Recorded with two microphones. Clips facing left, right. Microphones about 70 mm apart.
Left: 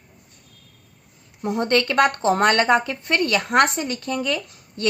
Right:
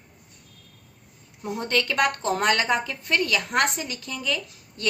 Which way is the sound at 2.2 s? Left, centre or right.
Left.